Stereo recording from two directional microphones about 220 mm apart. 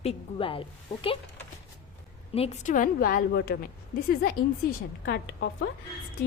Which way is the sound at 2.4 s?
35° left (ahead or behind).